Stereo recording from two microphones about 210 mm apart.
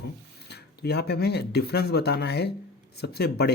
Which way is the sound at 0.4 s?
50° left (ahead or behind).